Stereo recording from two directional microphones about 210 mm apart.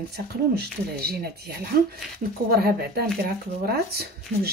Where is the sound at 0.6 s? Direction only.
50° right (ahead or behind).